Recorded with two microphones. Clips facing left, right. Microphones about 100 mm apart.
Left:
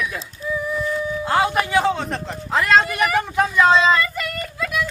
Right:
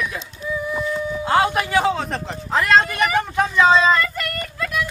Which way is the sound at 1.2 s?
Centre (ahead or behind).